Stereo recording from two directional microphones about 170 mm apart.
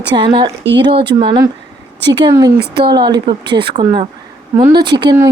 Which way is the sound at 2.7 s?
25° right (ahead or behind).